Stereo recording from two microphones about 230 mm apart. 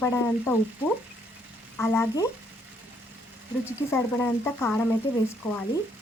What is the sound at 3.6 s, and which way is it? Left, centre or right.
Speech, centre.